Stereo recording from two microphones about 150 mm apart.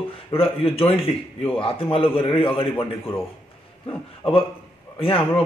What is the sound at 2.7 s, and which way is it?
Speech, 15° left (ahead or behind).